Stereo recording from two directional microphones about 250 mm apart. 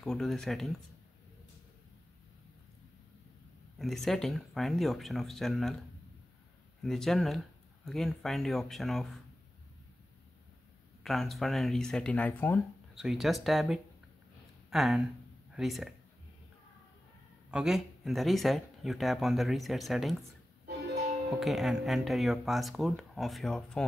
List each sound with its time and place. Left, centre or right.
0.0 s speech: centre
3.7 s speech: centre
6.8 s speech: centre
11.1 s speech: centre
17.5 s speech: centre
20.6 s music: right
21.4 s speech: centre